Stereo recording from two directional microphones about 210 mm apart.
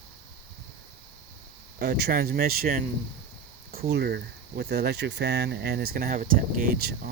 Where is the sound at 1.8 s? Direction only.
50° right (ahead or behind).